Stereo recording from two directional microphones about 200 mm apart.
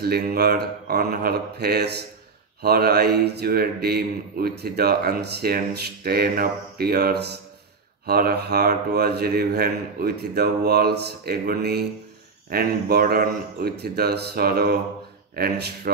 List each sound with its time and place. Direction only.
0.0 s a man's voice: 50° right (ahead or behind)